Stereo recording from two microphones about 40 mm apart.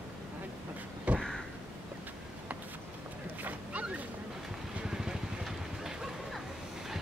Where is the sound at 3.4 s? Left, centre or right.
Right.